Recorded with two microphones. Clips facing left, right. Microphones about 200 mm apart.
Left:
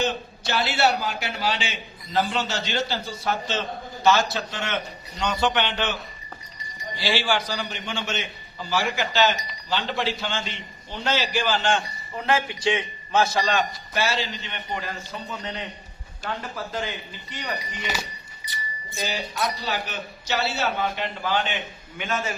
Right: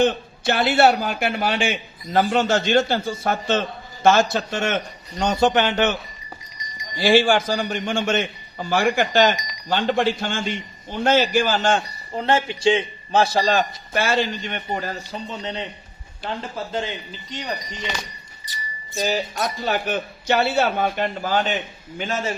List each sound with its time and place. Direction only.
0.0 s a man's voice: 55° right (ahead or behind)
7.0 s a man's voice: 50° right (ahead or behind)
13.9 s a man's voice: 50° right (ahead or behind); by 16.9 s 25° right (ahead or behind)
17.7 s speech: 5° left (ahead or behind)
19.0 s a man's voice: 45° right (ahead or behind)